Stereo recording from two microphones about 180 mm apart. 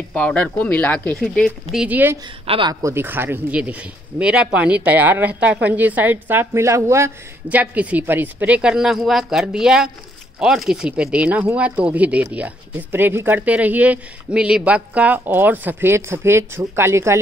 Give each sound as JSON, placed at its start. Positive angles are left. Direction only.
{"t": 0.1, "sound": "speech", "side_deg": 10}
{"t": 2.4, "sound": "speech", "side_deg": -30}
{"t": 2.7, "sound": "speech", "side_deg": -15}